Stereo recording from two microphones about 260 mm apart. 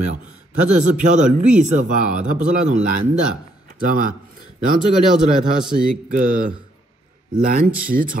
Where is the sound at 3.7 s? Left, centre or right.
Right.